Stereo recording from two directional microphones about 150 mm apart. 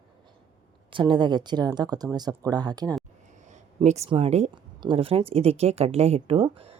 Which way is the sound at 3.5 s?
50° right (ahead or behind).